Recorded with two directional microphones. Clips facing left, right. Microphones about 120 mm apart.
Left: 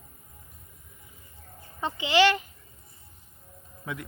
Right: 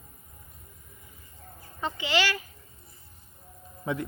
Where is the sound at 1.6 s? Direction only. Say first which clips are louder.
Left 1 dB; 20° left (ahead or behind).